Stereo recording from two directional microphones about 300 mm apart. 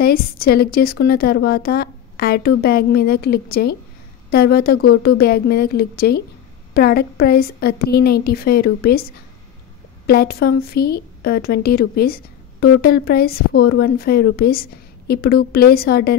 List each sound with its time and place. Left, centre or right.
0.0 s a woman's voice: left
10.0 s a woman's voice: left